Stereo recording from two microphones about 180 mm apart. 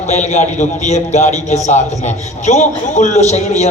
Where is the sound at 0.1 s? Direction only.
40° left (ahead or behind).